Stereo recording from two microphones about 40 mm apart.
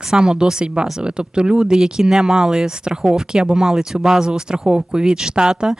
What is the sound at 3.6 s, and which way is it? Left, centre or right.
Speech, centre.